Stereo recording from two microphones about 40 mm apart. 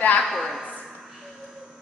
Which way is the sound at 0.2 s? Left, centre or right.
Centre.